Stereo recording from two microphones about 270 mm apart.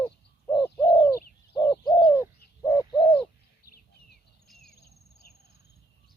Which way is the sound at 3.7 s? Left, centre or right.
Left.